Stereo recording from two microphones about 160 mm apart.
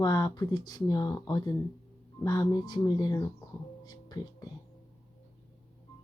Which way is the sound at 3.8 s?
25° left (ahead or behind).